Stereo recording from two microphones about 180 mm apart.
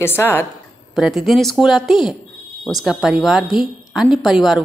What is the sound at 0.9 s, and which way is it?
Speech, centre (ahead or behind).